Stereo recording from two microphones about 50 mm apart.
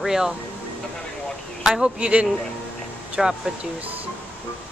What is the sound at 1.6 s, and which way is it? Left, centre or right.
Speech, centre.